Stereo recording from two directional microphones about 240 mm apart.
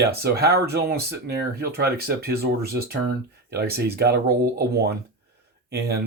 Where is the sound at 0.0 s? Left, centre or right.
Right.